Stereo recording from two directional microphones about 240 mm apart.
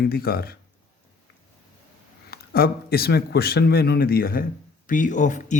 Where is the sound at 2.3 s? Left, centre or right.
Left.